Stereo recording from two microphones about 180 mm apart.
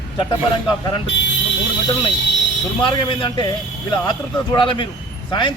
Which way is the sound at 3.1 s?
25° left (ahead or behind).